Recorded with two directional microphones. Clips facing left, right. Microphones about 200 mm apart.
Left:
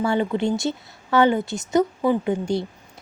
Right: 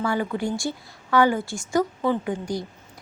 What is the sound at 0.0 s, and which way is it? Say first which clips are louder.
A woman's voice: left 4 dB; 25° left (ahead or behind).